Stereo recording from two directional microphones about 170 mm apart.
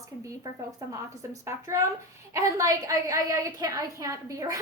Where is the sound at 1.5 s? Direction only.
15° right (ahead or behind).